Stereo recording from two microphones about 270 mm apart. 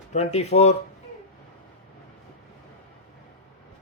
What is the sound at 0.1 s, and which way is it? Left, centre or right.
Speech, left.